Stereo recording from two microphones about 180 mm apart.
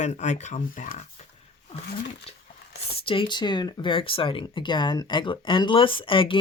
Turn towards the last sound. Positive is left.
turn(degrees=30)  # may be behind; listen again after turning